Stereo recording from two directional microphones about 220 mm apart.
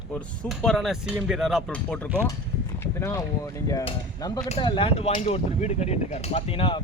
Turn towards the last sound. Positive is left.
turn(degrees=25)  # may be behind; listen again after turning